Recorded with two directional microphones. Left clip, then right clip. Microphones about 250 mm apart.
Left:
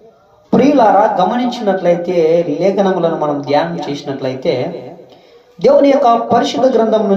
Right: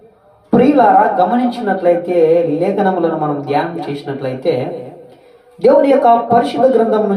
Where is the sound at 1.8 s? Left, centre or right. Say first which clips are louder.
Right 2 dB; left.